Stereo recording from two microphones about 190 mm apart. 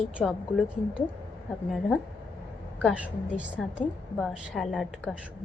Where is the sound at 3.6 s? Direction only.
5° left (ahead or behind).